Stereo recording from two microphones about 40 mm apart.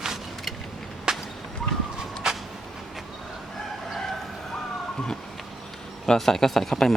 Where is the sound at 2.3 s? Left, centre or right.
Centre.